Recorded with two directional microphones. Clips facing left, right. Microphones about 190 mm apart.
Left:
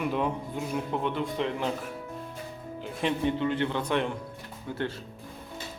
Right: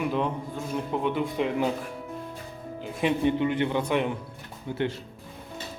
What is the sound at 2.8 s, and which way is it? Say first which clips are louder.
A man's voice: right 3 dB; 10° right (ahead or behind).